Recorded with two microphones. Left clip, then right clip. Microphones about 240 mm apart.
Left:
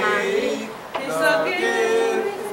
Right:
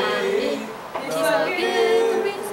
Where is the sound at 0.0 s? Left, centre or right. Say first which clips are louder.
Left 1 dB; centre.